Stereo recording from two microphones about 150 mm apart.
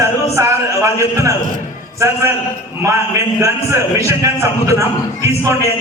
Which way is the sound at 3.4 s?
20° right (ahead or behind).